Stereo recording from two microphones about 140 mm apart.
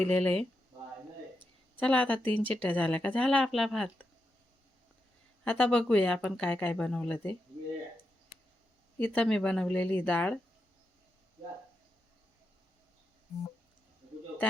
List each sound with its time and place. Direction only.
0.0 s speech: 5° left (ahead or behind)
1.8 s speech: 10° left (ahead or behind)
5.5 s speech: 10° left (ahead or behind)
9.0 s speech: 10° left (ahead or behind)